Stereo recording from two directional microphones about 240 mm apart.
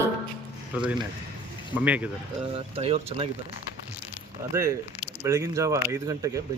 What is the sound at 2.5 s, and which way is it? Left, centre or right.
Speech, right.